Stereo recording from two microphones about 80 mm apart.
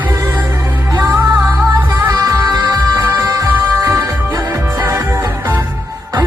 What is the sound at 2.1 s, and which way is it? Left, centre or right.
Music, right.